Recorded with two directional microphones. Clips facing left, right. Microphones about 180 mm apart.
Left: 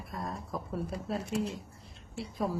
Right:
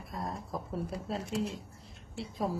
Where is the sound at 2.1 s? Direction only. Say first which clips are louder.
Left 1 dB; 25° right (ahead or behind).